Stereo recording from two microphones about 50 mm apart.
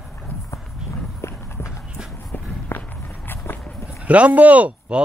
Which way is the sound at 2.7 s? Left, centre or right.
Left.